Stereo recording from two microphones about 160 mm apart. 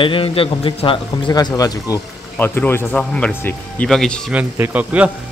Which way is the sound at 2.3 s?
10° left (ahead or behind).